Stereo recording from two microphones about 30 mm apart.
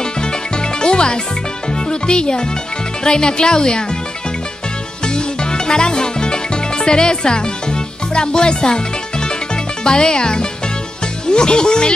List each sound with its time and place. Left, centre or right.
0.0 s music: left
3.0 s speech: left
5.0 s music: left
9.8 s speech: left